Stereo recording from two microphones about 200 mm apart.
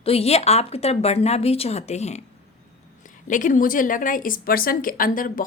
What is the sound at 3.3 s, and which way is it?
A woman's voice, 40° left (ahead or behind).